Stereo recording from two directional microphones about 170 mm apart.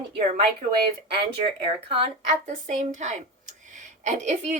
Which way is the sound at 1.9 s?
40° right (ahead or behind).